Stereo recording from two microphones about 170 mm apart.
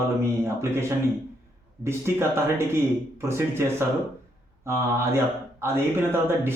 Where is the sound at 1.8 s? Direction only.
15° right (ahead or behind).